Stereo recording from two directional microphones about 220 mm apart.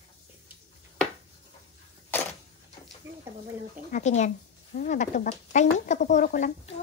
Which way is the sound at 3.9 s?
30° left (ahead or behind).